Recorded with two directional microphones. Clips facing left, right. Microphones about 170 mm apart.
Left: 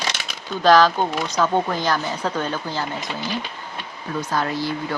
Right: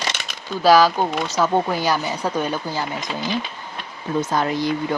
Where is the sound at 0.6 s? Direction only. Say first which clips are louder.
Right 1 dB; 10° right (ahead or behind).